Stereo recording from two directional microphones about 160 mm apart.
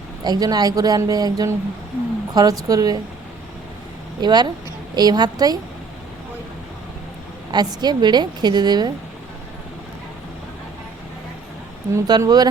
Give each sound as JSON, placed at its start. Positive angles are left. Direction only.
{"t": 0.3, "sound": "a woman's voice", "side_deg": -25}
{"t": 4.2, "sound": "a woman's voice", "side_deg": -25}
{"t": 7.5, "sound": "a woman's voice", "side_deg": -25}
{"t": 11.9, "sound": "a woman's voice", "side_deg": -20}